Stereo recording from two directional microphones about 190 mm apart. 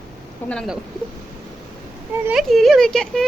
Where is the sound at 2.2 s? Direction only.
Centre (ahead or behind).